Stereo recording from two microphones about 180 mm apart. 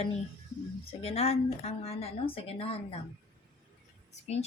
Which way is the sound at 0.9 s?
35° left (ahead or behind).